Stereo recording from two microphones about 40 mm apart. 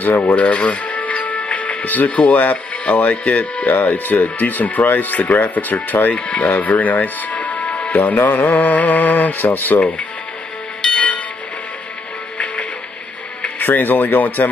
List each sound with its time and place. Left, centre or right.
0.0 s music: left
2.0 s speech: left
6.1 s speech: left
7.9 s mantra: left
9.8 s speech: left
10.8 s a sound: left
13.6 s mantra: left